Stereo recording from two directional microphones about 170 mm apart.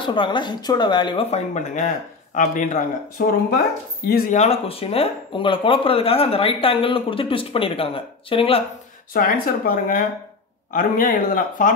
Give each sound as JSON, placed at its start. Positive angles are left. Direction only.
{"t": 0.0, "sound": "speech", "side_deg": 30}
{"t": 1.3, "sound": "speech", "side_deg": 40}
{"t": 4.3, "sound": "speech", "side_deg": 40}
{"t": 9.1, "sound": "speech", "side_deg": 60}